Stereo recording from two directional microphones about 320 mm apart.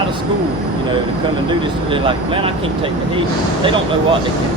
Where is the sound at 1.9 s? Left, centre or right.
Centre.